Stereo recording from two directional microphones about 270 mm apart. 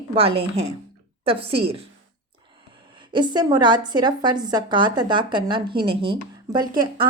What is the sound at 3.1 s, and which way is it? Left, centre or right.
A woman's voice, centre.